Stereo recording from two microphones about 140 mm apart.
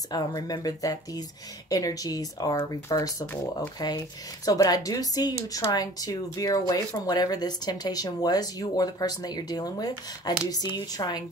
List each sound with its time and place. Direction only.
0.1 s speech: 30° left (ahead or behind)